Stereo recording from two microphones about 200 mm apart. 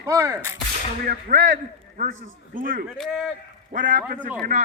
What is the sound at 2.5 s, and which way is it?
Speech, 45° right (ahead or behind).